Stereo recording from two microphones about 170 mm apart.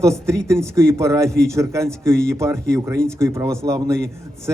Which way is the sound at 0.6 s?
15° right (ahead or behind).